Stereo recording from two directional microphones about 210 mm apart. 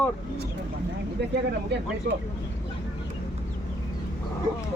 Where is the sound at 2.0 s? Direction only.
45° right (ahead or behind).